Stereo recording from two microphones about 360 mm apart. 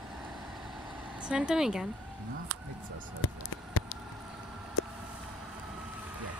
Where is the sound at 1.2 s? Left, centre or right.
Centre.